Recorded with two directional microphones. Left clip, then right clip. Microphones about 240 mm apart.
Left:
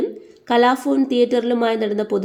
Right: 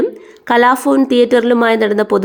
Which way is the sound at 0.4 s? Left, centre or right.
Right.